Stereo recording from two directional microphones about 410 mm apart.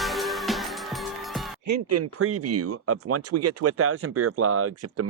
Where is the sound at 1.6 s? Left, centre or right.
Right.